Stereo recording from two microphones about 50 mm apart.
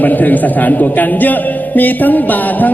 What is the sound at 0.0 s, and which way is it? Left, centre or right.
A man's voice, left.